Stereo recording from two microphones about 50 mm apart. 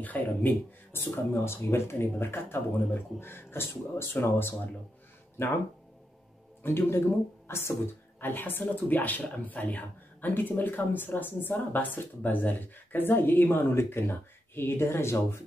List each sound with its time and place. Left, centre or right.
0.0 s speech: left
0.9 s speech: left
6.6 s speech: left